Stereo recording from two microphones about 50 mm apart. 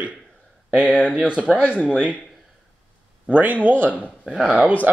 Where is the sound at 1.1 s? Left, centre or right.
Right.